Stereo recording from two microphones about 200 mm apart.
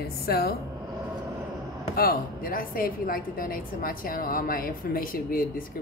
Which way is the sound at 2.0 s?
45° left (ahead or behind).